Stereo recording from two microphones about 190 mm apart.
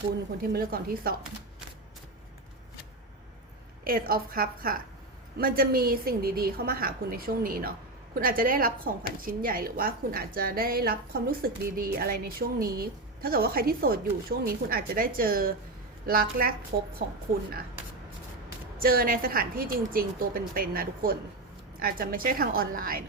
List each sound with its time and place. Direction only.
0.5 s a woman's voice: 50° right (ahead or behind)
3.8 s a woman's voice: 50° right (ahead or behind)
18.8 s a woman's voice: 50° right (ahead or behind)